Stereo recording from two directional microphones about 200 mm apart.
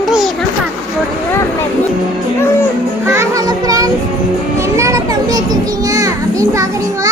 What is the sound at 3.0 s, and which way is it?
Child singing, 15° right (ahead or behind).